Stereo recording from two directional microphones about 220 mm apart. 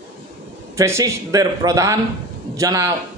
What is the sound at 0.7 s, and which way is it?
A man's voice, 15° right (ahead or behind).